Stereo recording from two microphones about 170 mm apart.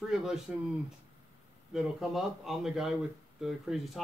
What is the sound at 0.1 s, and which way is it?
Speech, centre (ahead or behind).